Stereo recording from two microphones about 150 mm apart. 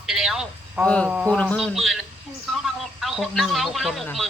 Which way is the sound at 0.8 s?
5° left (ahead or behind).